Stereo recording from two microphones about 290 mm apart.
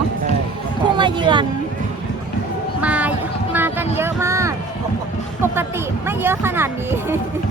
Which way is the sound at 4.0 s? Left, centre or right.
Centre.